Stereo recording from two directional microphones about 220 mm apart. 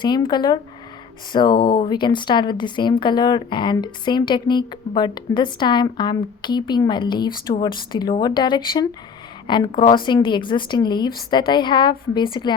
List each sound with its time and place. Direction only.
0.0 s a woman's voice: 20° left (ahead or behind)